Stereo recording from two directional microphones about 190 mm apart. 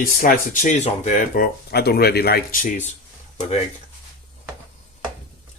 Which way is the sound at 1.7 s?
55° left (ahead or behind).